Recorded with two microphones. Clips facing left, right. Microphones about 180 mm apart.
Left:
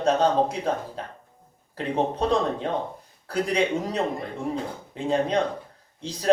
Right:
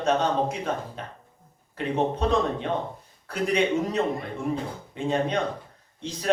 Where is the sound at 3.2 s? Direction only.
35° left (ahead or behind).